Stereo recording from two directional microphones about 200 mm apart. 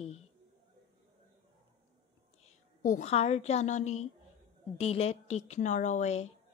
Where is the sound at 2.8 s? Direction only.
35° left (ahead or behind).